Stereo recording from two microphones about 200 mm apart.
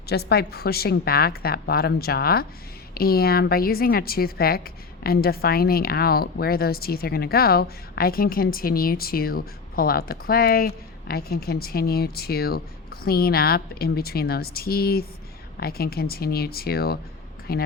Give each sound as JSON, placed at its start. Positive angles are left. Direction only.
{"t": 0.1, "sound": "a woman's voice", "side_deg": 55}